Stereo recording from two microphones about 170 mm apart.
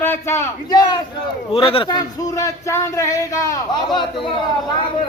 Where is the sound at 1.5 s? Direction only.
35° left (ahead or behind).